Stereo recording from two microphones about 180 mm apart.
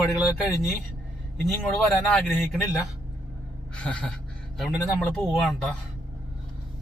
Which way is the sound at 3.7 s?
5° left (ahead or behind).